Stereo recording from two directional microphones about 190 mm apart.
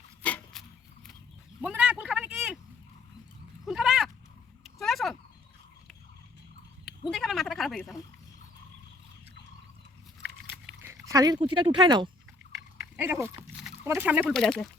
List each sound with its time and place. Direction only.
0.2 s a sound: 5° left (ahead or behind)
1.6 s vehicle: 5° right (ahead or behind)
3.7 s cat: centre (ahead or behind)
4.6 s a sound: centre (ahead or behind)
7.1 s a sound: centre (ahead or behind)
10.8 s speech: 15° right (ahead or behind)
12.5 s dog: 5° right (ahead or behind)
13.8 s speech: 10° right (ahead or behind)
14.3 s speech: 5° left (ahead or behind)